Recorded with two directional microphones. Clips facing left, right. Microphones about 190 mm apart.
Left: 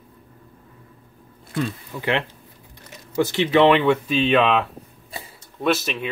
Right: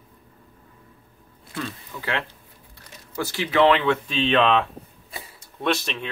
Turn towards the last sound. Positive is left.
turn(degrees=5)  # may be behind; listen again after turning